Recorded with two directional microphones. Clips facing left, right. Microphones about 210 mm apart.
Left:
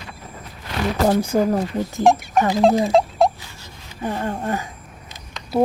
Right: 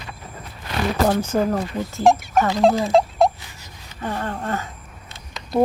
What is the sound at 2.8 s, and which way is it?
Rodents, centre (ahead or behind).